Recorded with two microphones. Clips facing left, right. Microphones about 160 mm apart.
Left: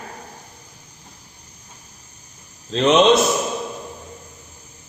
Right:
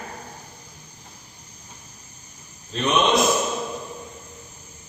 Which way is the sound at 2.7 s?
90° left.